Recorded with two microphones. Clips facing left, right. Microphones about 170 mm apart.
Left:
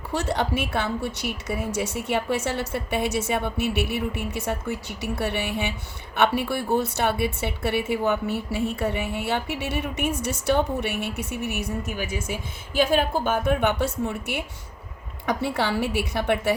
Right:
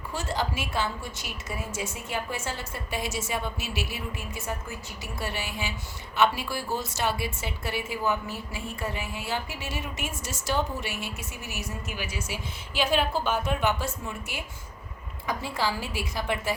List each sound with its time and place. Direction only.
0.1 s a woman's voice: 70° left (ahead or behind)
12.3 s a woman's voice: 50° left (ahead or behind); by 16.6 s 65° left (ahead or behind)